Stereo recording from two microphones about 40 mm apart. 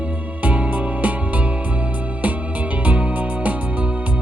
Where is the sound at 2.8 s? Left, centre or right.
Right.